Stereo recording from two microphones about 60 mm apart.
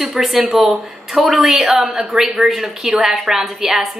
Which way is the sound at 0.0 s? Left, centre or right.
Centre.